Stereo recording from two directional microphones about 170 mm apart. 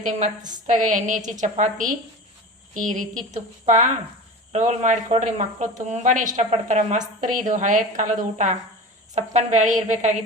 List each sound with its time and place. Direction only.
0.0 s a woman's voice: 45° right (ahead or behind)